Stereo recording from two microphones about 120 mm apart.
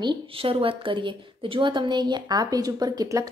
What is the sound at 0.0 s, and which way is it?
A woman's voice, 45° right (ahead or behind).